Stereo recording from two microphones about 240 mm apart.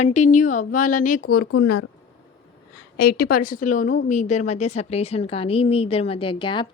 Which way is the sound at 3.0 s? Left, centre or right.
Left.